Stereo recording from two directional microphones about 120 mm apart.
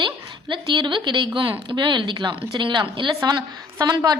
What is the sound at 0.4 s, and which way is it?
Speech, 40° right (ahead or behind).